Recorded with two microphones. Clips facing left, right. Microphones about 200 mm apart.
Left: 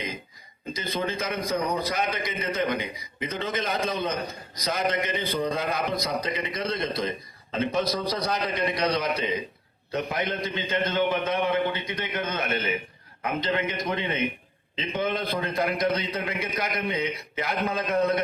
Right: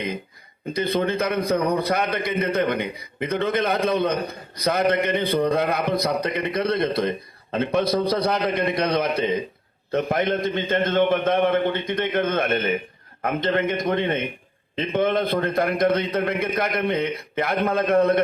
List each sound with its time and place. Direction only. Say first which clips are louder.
0.7 s a man's voice: right 7 dB; 60° right (ahead or behind)